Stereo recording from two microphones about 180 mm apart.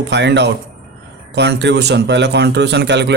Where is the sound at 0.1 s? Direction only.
75° right (ahead or behind).